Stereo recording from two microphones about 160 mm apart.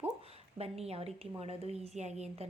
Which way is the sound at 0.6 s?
40° right (ahead or behind).